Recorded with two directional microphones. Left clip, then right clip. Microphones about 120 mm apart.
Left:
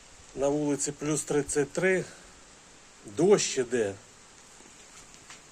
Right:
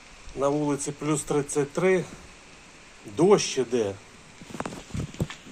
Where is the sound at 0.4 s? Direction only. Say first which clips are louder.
Right 2 dB; 10° left (ahead or behind).